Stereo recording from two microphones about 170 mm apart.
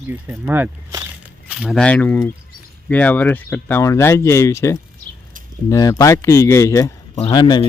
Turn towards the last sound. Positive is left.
turn(degrees=25)  # may be behind; listen again after turning